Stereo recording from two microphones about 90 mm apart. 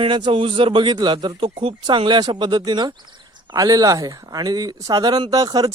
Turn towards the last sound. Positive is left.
turn(degrees=-45)  # may be behind; listen again after turning